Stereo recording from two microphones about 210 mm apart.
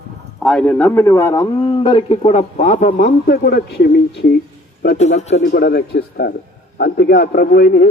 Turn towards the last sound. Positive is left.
turn(degrees=45)  # may be behind; listen again after turning